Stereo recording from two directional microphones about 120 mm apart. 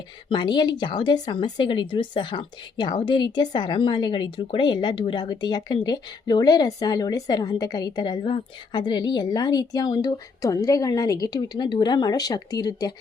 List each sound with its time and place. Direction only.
0.3 s speech: 40° left (ahead or behind)